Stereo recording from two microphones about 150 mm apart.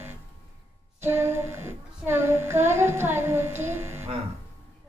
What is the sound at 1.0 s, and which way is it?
Child singing, 15° right (ahead or behind).